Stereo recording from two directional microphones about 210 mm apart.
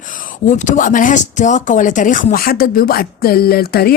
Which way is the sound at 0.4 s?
35° left (ahead or behind).